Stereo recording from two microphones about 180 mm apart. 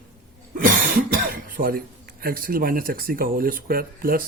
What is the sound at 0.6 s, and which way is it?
Cough, 50° right (ahead or behind).